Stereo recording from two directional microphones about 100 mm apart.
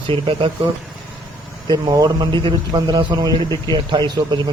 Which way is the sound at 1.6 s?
45° right (ahead or behind).